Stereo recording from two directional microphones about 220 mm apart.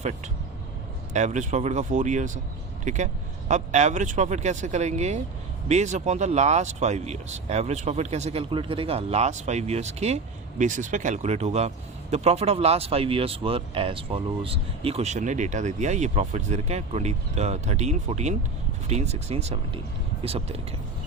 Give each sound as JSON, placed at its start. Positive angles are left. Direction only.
{"t": 1.1, "sound": "speech", "side_deg": -35}